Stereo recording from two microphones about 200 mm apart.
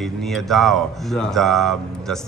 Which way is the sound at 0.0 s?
Centre (ahead or behind).